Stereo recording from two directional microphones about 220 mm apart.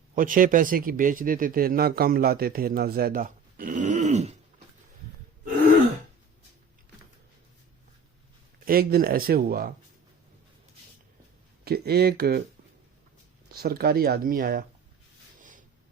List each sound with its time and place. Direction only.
0.2 s speech: 40° right (ahead or behind)
8.6 s speech: 45° right (ahead or behind)
11.6 s speech: 45° right (ahead or behind)
13.5 s speech: 45° right (ahead or behind)
15.4 s a sound: 35° right (ahead or behind)